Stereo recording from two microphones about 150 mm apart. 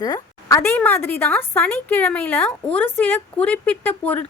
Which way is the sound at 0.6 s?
15° left (ahead or behind).